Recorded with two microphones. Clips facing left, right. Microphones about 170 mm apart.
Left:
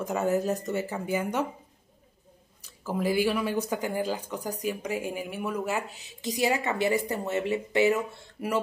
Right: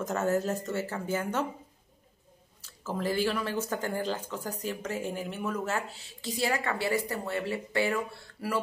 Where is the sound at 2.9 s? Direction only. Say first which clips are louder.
Left 3 dB; 10° left (ahead or behind).